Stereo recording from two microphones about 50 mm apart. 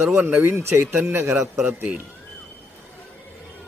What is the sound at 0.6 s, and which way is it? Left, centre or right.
Speech, right.